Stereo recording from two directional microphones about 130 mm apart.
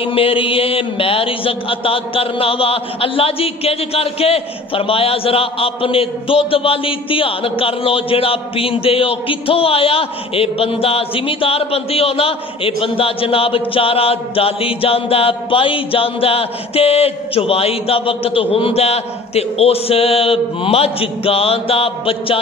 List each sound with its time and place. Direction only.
0.0 s speech: 45° left (ahead or behind)